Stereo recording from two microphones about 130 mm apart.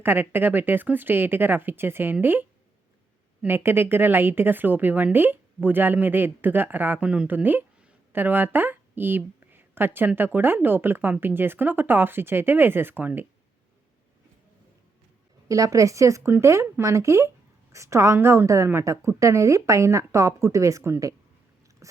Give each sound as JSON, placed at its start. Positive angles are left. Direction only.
{"t": 0.0, "sound": "a woman's voice", "side_deg": -15}
{"t": 15.4, "sound": "speech", "side_deg": -25}